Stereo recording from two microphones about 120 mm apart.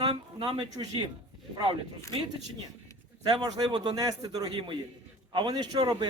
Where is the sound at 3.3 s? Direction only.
35° right (ahead or behind).